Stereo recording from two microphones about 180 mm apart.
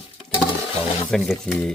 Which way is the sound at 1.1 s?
Centre (ahead or behind).